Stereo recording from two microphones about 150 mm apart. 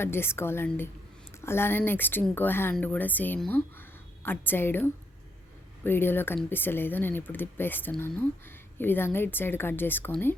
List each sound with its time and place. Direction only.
0.0 s a woman's voice: 15° left (ahead or behind)